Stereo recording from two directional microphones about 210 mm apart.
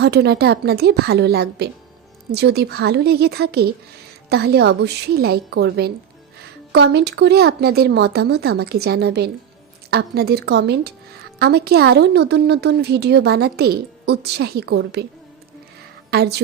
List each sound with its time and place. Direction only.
0.0 s a woman's voice: 50° right (ahead or behind)
16.0 s a woman's voice: 50° right (ahead or behind)